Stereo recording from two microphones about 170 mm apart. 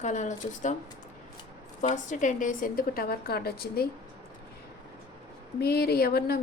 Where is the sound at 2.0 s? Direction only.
50° left (ahead or behind); by 3.8 s 65° left (ahead or behind).